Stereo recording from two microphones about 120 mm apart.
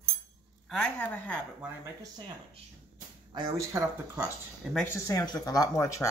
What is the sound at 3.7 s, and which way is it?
Speech, 25° right (ahead or behind).